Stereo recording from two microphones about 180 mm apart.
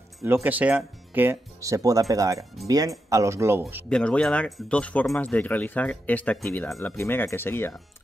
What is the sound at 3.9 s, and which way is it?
Speech, 5° left (ahead or behind).